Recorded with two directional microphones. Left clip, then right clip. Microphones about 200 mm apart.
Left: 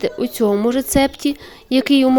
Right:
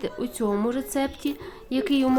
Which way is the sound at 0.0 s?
30° left (ahead or behind).